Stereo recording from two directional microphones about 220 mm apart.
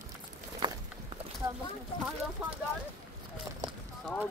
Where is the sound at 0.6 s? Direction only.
20° right (ahead or behind).